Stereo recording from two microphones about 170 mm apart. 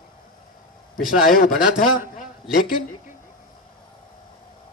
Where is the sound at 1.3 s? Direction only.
55° left (ahead or behind).